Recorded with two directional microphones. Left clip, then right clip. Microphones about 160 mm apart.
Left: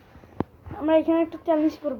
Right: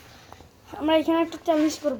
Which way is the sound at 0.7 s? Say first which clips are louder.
Left 1 dB; 10° right (ahead or behind).